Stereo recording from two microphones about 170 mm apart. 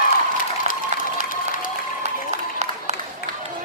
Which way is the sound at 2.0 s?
40° right (ahead or behind).